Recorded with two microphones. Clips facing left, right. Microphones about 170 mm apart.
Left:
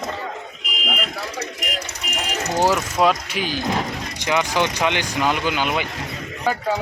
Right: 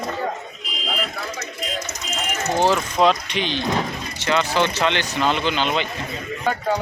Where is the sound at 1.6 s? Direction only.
75° left (ahead or behind).